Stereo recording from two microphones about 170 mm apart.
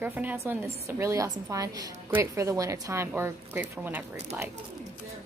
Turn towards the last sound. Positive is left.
turn(degrees=-10)  # may be behind; listen again after turning